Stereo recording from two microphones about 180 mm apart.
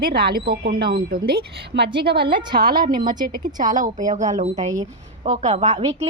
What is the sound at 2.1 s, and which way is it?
A woman's voice, 25° right (ahead or behind).